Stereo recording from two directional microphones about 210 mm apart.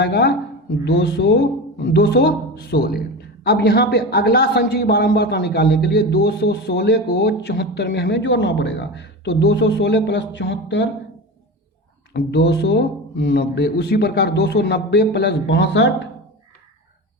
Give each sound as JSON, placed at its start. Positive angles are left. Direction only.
{"t": 0.0, "sound": "speech", "side_deg": 50}
{"t": 12.1, "sound": "speech", "side_deg": 50}